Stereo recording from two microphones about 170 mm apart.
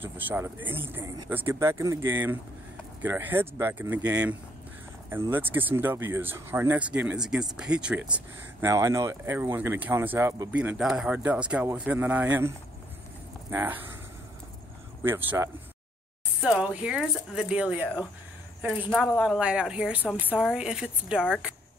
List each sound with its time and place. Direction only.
0.0 s speech: 10° right (ahead or behind)
15.0 s speech: 10° right (ahead or behind)